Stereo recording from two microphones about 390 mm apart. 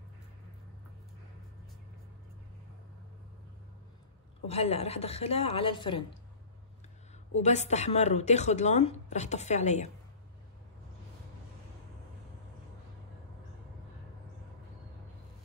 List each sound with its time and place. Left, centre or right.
4.5 s a woman's voice: centre
7.4 s a woman's voice: centre